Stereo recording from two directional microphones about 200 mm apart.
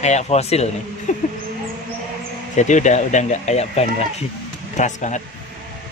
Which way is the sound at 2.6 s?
35° left (ahead or behind).